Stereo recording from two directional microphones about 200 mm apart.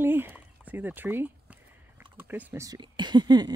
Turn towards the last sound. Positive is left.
turn(degrees=-20)  # may be behind; listen again after turning